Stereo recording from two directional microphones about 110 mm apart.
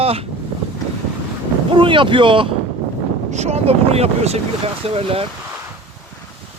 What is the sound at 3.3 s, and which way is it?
Speech, 80° right.